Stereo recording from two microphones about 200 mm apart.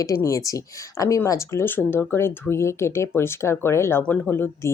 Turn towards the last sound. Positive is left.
turn(degrees=10)  # may be behind; listen again after turning